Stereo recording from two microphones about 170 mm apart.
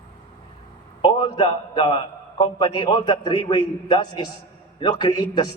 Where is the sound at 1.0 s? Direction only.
30° left (ahead or behind).